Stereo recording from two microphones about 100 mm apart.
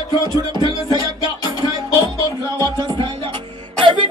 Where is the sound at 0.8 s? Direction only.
45° left (ahead or behind).